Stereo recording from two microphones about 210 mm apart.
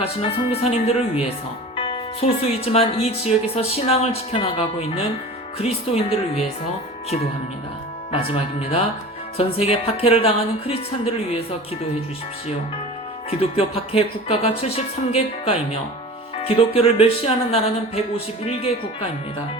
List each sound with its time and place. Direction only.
0.0 s speech: 30° left (ahead or behind)
8.1 s speech: 25° left (ahead or behind)
13.4 s speech: 30° left (ahead or behind)